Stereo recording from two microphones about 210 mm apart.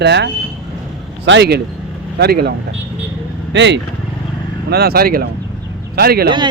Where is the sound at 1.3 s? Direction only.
55° right (ahead or behind).